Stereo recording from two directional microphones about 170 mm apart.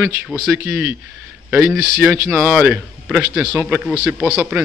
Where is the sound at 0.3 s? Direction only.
5° right (ahead or behind).